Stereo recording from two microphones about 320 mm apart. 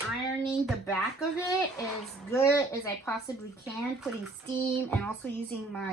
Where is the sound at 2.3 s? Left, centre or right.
Centre.